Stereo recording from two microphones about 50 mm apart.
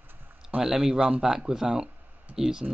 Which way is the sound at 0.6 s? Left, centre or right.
Centre.